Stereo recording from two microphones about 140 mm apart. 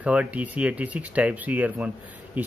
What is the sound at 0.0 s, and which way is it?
Speech, 10° right (ahead or behind).